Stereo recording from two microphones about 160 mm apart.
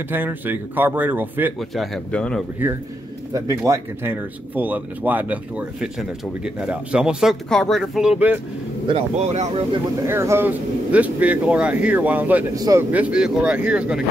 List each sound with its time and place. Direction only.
0.1 s speech: 10° right (ahead or behind)
1.6 s speech: 5° left (ahead or behind)
3.3 s speech: 20° right (ahead or behind)
8.8 s speech: 40° right (ahead or behind)
10.0 s speech: 15° right (ahead or behind)
12.5 s speech: 25° right (ahead or behind)
12.9 s speech: 5° right (ahead or behind)